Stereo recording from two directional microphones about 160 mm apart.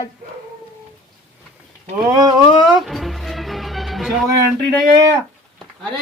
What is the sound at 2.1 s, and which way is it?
Speech, 25° right (ahead or behind).